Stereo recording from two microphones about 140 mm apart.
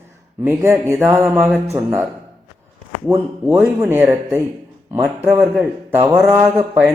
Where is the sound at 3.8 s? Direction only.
15° right (ahead or behind).